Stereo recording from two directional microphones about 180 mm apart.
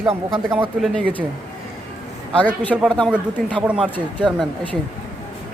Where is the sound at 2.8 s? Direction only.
5° left (ahead or behind).